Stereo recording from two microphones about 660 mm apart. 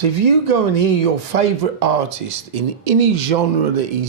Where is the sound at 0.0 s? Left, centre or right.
Right.